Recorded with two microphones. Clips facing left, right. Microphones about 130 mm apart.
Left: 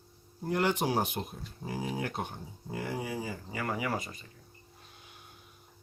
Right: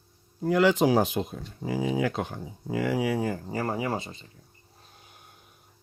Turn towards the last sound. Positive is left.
turn(degrees=-45)  # may be behind; listen again after turning